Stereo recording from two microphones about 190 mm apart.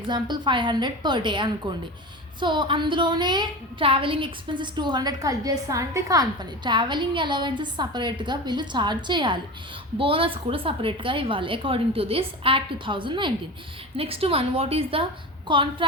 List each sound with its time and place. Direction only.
0.1 s a woman's voice: 25° right (ahead or behind)